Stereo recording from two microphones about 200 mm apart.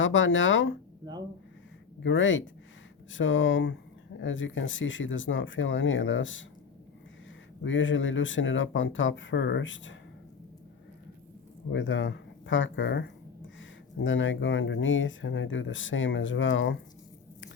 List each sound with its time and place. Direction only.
0.0 s speech: 70° left (ahead or behind)
2.0 s speech: 70° left (ahead or behind)
7.6 s speech: 70° left (ahead or behind)
11.7 s speech: 70° left (ahead or behind)